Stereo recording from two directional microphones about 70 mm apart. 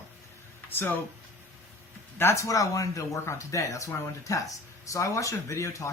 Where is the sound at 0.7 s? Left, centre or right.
Left.